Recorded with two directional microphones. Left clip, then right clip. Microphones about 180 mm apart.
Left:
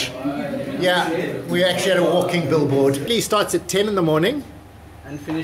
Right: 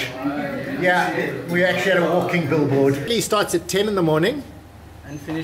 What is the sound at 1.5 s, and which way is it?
A man's voice, centre (ahead or behind).